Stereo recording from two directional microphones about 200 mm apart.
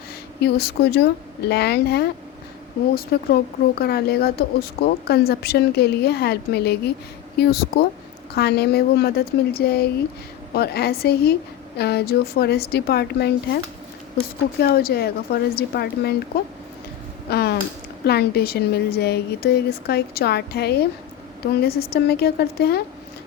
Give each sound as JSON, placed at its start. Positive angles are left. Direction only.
{"t": 0.4, "sound": "speech", "side_deg": 55}
{"t": 14.6, "sound": "speech", "side_deg": 50}
{"t": 17.2, "sound": "speech", "side_deg": 55}